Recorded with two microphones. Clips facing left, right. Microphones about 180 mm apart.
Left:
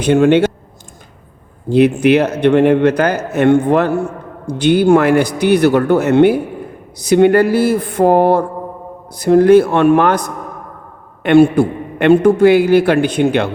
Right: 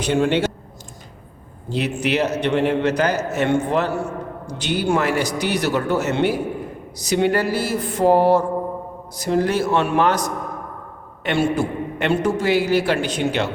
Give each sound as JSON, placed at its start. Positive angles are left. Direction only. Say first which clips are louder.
{"t": 0.0, "sound": "a man's voice", "louder": "left 8 dB", "side_deg": 55}
{"t": 1.7, "sound": "a man's voice", "louder": "left 11 dB", "side_deg": 55}